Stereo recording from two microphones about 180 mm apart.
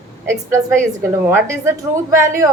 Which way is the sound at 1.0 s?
15° right (ahead or behind).